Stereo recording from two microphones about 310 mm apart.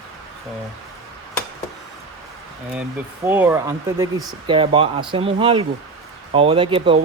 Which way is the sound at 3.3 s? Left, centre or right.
Centre.